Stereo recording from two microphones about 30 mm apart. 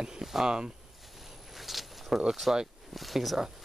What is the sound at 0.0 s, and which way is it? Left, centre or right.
Speech, right.